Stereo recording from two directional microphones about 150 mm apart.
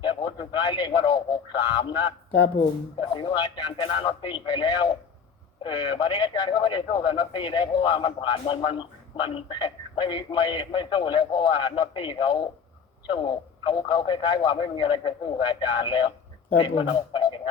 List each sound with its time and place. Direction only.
0.0 s a man's voice: 30° left (ahead or behind)
3.0 s a man's voice: 35° left (ahead or behind)